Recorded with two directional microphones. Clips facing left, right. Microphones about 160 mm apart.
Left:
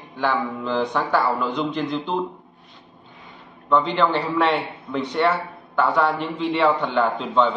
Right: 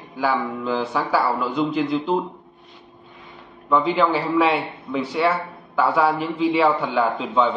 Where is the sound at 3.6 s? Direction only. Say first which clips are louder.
Right 1 dB; 5° right (ahead or behind).